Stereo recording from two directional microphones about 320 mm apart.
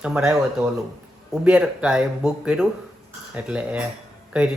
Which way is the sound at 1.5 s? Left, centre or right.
Centre.